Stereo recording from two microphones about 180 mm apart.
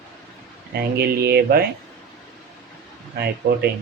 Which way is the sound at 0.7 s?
60° right (ahead or behind).